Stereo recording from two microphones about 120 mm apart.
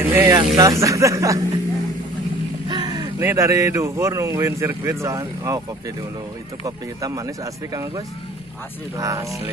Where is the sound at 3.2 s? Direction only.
25° right (ahead or behind).